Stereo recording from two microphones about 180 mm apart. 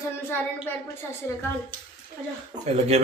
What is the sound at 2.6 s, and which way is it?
Speech, 35° right (ahead or behind).